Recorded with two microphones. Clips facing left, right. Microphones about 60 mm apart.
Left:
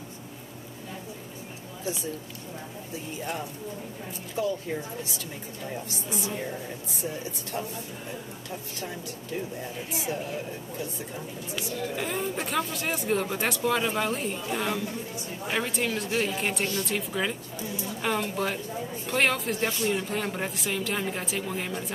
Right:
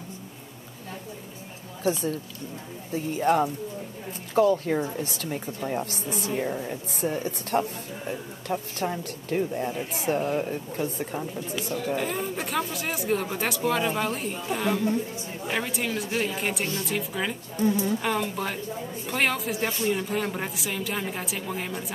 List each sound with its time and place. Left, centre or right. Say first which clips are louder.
2.9 s speech: right 12 dB; right
11.9 s speech: right 3 dB; centre
17.6 s speech: right 10 dB; right
18.0 s speech: even; centre